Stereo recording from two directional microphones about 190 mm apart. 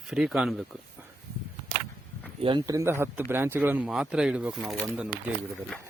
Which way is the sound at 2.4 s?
25° right (ahead or behind).